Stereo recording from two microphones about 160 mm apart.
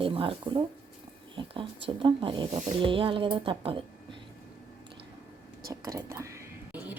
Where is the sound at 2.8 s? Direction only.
30° right (ahead or behind).